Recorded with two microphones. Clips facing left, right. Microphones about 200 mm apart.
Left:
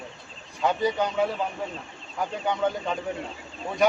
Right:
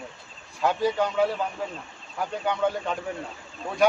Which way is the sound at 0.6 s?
Centre (ahead or behind).